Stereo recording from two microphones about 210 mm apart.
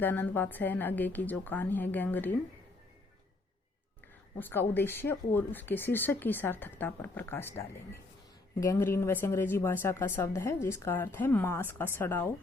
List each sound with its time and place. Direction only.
0.0 s speech: 10° left (ahead or behind)
4.4 s speech: 10° left (ahead or behind)